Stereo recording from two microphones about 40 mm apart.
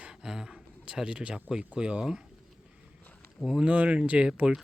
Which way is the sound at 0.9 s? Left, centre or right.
Right.